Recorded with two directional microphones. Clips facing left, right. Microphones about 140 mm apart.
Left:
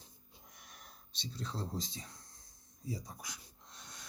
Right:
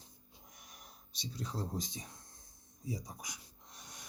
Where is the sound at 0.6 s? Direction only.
15° right (ahead or behind).